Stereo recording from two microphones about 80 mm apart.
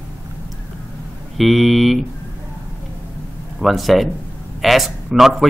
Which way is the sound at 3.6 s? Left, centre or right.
Centre.